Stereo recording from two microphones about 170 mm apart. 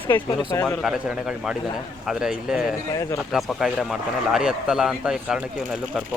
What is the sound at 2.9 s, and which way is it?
Speech, 20° left (ahead or behind).